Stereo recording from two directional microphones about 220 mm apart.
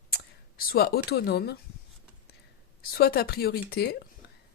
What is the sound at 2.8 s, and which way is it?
Speech, 45° left (ahead or behind).